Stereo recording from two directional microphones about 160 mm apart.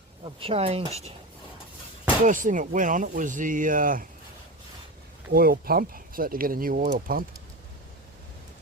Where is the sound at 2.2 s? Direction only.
55° right (ahead or behind).